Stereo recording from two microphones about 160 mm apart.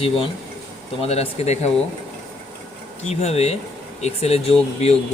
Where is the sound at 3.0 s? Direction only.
40° left (ahead or behind).